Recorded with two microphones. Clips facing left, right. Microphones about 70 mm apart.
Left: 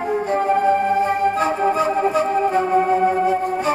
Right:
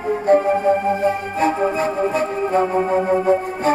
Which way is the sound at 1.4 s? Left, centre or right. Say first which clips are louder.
Even; right.